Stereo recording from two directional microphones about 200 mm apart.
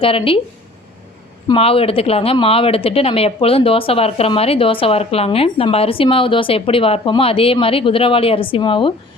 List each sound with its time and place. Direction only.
0.0 s speech: 25° left (ahead or behind)
1.5 s speech: 30° left (ahead or behind)